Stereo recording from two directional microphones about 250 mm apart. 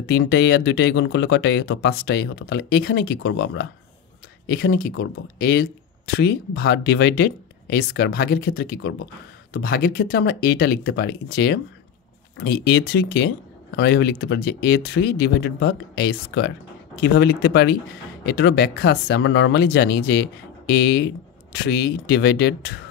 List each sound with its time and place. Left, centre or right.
0.0 s speech: left